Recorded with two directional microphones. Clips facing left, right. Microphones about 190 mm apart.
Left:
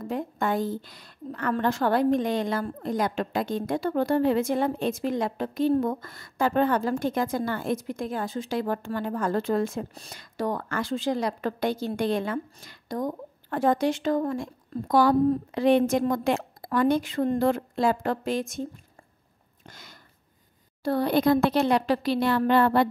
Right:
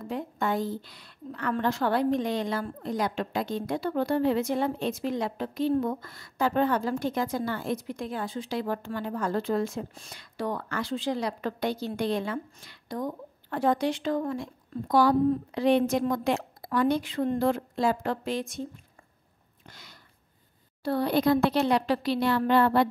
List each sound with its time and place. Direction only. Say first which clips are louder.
0.0 s a woman's voice: left 2 dB; 50° left (ahead or behind)
19.7 s a sound: left 2 dB; 45° left (ahead or behind)
20.8 s a woman's voice: left 2 dB; 45° left (ahead or behind)